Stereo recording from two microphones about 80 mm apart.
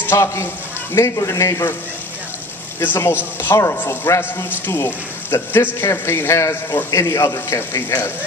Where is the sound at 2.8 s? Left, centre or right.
Left.